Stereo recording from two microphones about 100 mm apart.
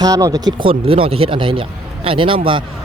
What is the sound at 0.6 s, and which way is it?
Speech, 65° right (ahead or behind).